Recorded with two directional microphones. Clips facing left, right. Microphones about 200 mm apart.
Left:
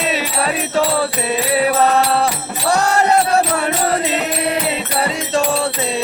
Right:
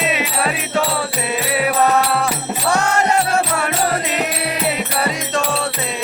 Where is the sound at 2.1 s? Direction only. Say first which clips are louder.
Left 2 dB; 35° left (ahead or behind).